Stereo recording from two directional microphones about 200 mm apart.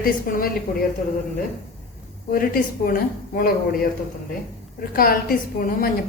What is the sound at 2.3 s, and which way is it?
A woman's voice, 45° left (ahead or behind).